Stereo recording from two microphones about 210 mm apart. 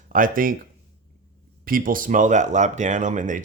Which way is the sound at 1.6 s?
40° right (ahead or behind).